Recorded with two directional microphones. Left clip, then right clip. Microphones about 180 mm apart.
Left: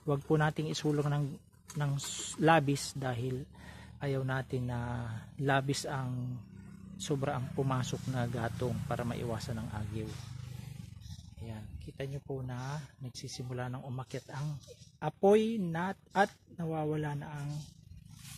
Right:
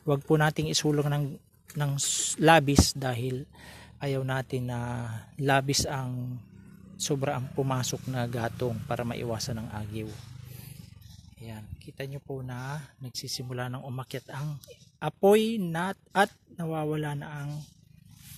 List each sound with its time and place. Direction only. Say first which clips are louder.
0.0 s speech: right 6 dB; 30° right (ahead or behind)
11.4 s speech: right 3 dB; 25° right (ahead or behind); by 17.5 s 40° right (ahead or behind)